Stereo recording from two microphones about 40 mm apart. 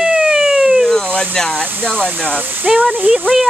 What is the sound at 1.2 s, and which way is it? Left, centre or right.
Speech, centre.